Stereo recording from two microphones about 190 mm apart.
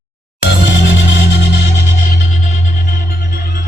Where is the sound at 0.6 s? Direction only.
80° left.